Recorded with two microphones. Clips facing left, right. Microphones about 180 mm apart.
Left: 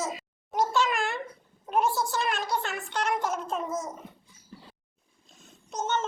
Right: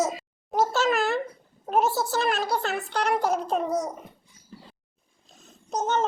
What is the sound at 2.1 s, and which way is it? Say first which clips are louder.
A child's voice: right 4 dB; 35° right (ahead or behind).